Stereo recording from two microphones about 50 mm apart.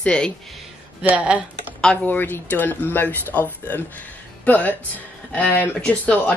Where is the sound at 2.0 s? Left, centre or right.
Left.